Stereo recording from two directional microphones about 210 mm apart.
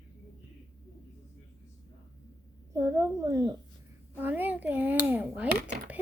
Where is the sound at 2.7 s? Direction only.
15° right (ahead or behind).